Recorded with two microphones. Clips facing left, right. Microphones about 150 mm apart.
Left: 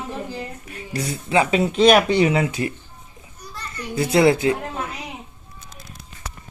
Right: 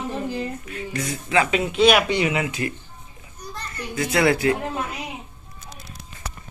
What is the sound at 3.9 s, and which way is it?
Speech, 30° left (ahead or behind).